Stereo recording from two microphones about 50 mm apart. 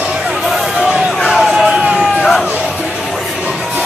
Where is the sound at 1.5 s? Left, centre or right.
Centre.